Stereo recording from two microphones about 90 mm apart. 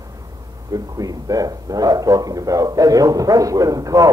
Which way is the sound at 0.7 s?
40° right (ahead or behind).